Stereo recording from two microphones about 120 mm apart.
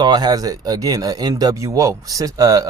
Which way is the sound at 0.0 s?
35° right (ahead or behind).